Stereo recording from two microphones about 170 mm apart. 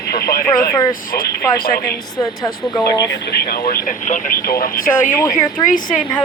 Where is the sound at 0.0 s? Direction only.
65° left (ahead or behind).